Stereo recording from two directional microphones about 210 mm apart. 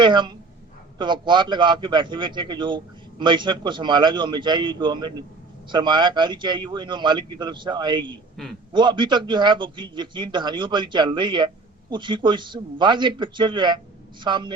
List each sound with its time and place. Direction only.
0.0 s a man's voice: 20° right (ahead or behind)